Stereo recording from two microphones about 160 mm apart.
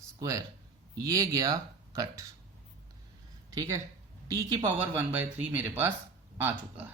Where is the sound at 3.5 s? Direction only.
20° right (ahead or behind).